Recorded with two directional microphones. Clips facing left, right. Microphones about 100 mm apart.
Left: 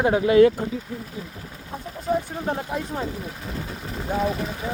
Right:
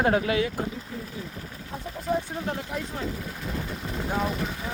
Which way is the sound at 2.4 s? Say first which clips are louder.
Left 4 dB; 30° left (ahead or behind).